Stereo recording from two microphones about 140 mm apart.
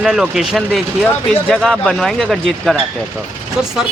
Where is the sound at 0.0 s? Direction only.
5° right (ahead or behind).